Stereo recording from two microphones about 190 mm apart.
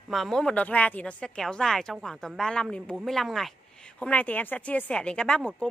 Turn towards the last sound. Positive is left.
turn(degrees=5)  # may be behind; listen again after turning